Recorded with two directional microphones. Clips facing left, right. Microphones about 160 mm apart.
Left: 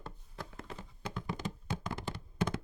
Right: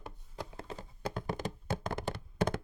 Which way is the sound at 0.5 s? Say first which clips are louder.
Right 2 dB; 35° right (ahead or behind).